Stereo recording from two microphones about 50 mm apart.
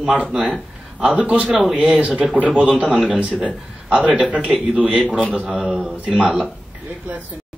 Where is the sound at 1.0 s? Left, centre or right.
Right.